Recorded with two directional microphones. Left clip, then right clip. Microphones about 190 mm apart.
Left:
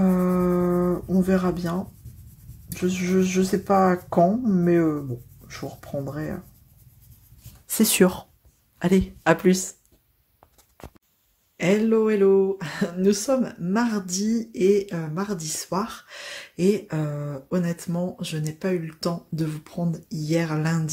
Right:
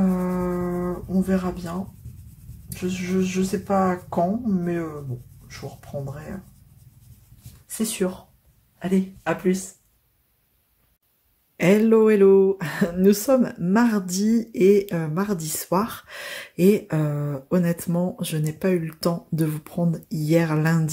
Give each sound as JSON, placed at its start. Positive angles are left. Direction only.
{"t": 0.0, "sound": "a sound", "side_deg": 40}
{"t": 2.7, "sound": "speech", "side_deg": 40}
{"t": 7.6, "sound": "speech", "side_deg": 50}
{"t": 11.5, "sound": "speech", "side_deg": -15}